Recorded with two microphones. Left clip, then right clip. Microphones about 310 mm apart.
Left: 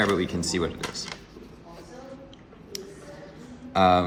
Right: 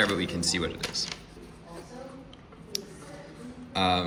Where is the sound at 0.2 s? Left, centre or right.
Left.